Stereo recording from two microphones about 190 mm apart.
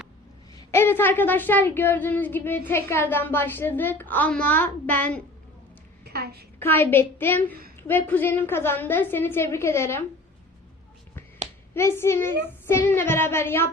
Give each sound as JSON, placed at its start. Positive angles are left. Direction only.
{"t": 0.5, "sound": "a woman's voice", "side_deg": 15}
{"t": 6.1, "sound": "a sound", "side_deg": -55}
{"t": 6.6, "sound": "a woman's voice", "side_deg": 10}
{"t": 11.7, "sound": "a woman's voice", "side_deg": 10}